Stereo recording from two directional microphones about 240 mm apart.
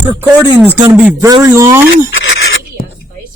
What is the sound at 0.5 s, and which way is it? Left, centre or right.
A man's voice, centre.